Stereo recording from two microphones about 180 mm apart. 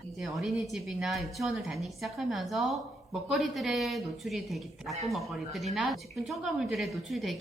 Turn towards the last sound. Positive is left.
turn(degrees=0)  # may be behind; listen again after turning